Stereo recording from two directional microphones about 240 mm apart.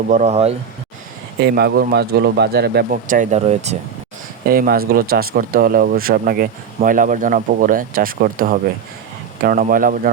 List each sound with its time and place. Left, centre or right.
0.1 s speech: right
1.4 s speech: right
4.4 s speech: right